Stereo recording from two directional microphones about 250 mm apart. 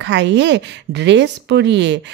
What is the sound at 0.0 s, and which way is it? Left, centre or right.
Speech, right.